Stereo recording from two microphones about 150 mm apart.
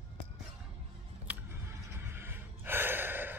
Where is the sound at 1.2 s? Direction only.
15° right (ahead or behind).